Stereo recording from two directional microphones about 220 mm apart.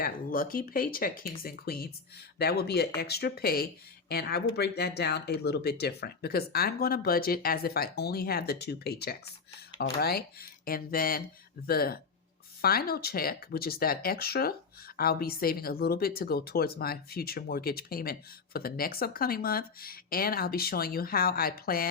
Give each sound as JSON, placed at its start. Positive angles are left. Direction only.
{"t": 0.0, "sound": "speech", "side_deg": 40}